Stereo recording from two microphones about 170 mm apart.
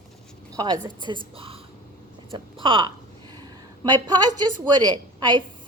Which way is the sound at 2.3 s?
30° right (ahead or behind).